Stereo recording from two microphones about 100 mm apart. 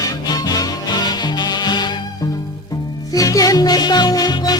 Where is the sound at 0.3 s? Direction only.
40° left (ahead or behind).